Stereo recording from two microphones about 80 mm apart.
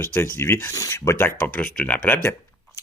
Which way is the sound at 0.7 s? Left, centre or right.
Left.